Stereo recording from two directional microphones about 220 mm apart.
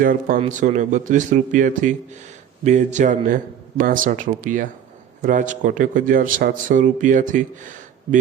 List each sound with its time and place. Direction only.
0.0 s a man's voice: 40° right (ahead or behind)